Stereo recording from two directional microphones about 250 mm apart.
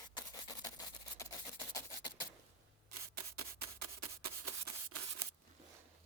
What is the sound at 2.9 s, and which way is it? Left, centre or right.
Rub, right.